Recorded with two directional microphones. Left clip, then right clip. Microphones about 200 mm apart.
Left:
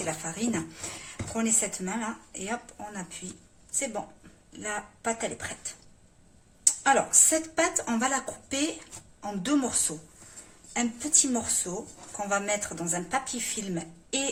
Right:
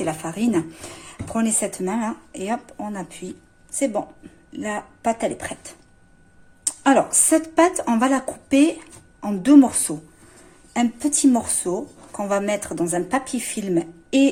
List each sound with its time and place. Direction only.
0.0 s a woman's voice: 35° right (ahead or behind)
4.6 s a woman's voice: 35° right (ahead or behind)
6.9 s a woman's voice: 30° right (ahead or behind)